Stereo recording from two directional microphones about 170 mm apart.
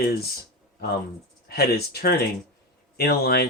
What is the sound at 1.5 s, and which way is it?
Speech, 65° left (ahead or behind).